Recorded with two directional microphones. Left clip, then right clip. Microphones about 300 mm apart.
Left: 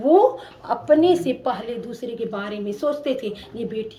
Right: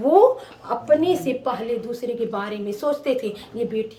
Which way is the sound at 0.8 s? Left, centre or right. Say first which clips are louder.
Left 2 dB; centre.